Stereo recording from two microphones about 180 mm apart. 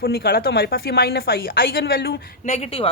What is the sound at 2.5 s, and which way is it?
Speech, 35° left (ahead or behind).